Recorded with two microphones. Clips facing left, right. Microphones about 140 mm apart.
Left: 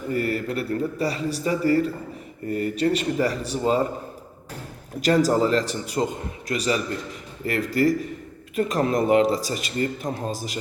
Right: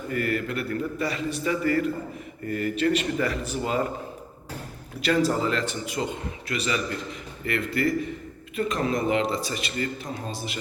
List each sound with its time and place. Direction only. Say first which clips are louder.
0.1 s a man's voice: left 2 dB; 30° left (ahead or behind)
4.9 s a man's voice: left 4 dB; 40° left (ahead or behind)